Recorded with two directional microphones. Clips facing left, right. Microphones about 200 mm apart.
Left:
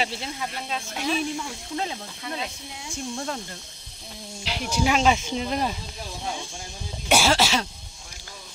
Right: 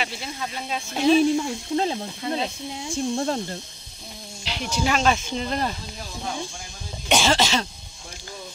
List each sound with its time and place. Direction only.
0.6 s speech: 5° right (ahead or behind)
0.9 s speech: 30° right (ahead or behind)
4.5 s speech: 10° left (ahead or behind)
7.1 s cough: 10° left (ahead or behind)